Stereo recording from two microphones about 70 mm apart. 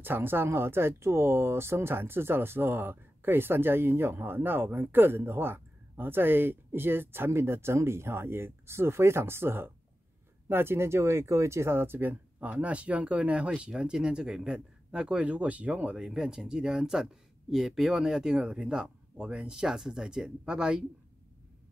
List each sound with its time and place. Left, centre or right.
0.0 s speech: right; by 20.8 s centre